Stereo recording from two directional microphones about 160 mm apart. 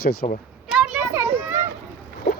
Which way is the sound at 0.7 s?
5° right (ahead or behind).